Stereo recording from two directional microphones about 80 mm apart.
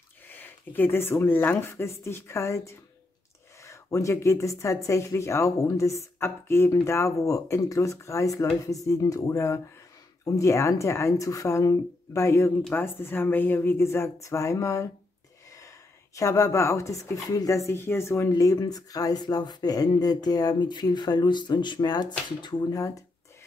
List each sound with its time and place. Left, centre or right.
0.3 s speech: left
16.2 s speech: left
18.3 s speech: left
22.6 s speech: left